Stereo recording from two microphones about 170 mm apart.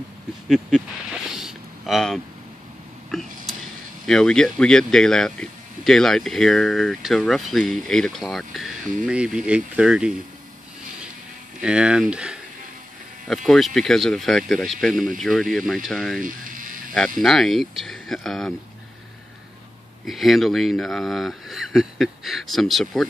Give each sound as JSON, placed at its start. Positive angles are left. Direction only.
{"t": 0.5, "sound": "a sound", "side_deg": 0}
{"t": 4.0, "sound": "speech", "side_deg": 5}
{"t": 11.6, "sound": "speech", "side_deg": -5}
{"t": 16.2, "sound": "a sound", "side_deg": -50}
{"t": 16.9, "sound": "speech", "side_deg": 5}
{"t": 20.1, "sound": "speech", "side_deg": 0}